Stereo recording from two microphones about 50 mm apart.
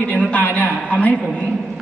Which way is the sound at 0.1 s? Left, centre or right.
Left.